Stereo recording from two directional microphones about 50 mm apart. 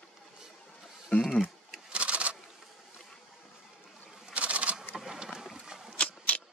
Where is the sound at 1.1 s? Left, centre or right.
Left.